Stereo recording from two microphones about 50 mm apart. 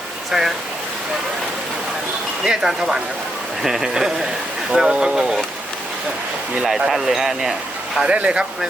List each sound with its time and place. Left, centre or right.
0.3 s speech: centre
2.4 s speech: centre
6.6 s speech: centre
8.0 s speech: right